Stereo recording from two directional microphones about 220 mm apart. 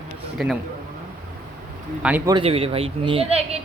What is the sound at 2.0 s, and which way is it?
Speech, 5° right (ahead or behind).